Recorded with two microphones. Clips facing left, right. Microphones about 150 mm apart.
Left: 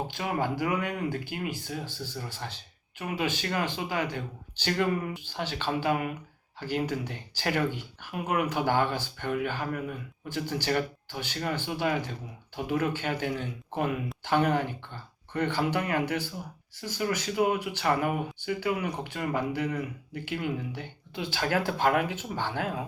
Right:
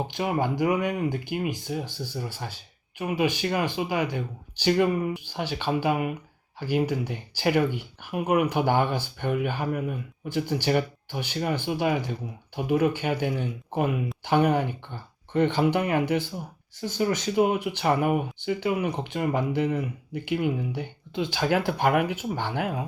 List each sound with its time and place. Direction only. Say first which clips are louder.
0.1 s speech: right 4 dB; 20° right (ahead or behind)